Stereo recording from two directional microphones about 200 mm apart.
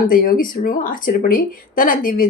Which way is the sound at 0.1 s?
45° left (ahead or behind).